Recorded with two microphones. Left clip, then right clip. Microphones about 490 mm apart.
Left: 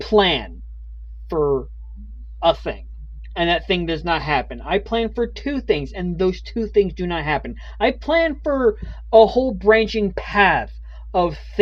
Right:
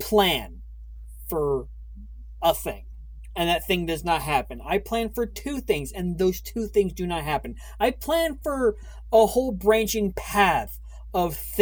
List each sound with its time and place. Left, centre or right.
0.0 s speech: right